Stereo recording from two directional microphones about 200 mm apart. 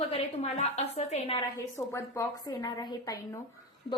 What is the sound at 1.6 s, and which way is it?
A woman's voice, 15° left (ahead or behind).